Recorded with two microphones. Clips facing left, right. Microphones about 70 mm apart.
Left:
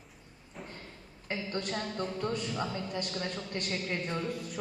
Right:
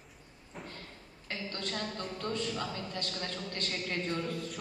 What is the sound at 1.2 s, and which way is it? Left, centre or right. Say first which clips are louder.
A woman's voice: left 4 dB; centre.